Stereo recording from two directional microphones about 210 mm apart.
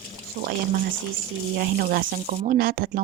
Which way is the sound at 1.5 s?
45° right (ahead or behind).